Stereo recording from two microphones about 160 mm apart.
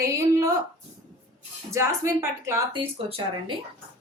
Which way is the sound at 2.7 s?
35° right (ahead or behind).